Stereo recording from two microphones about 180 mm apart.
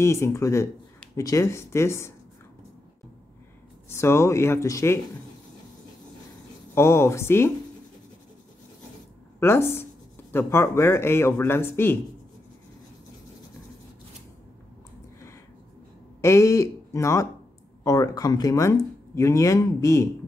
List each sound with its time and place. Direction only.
0.0 s speech: 15° left (ahead or behind)
3.9 s speech: 15° left (ahead or behind)
6.7 s speech: 15° left (ahead or behind)
9.4 s speech: 15° left (ahead or behind)
16.2 s speech: 15° left (ahead or behind)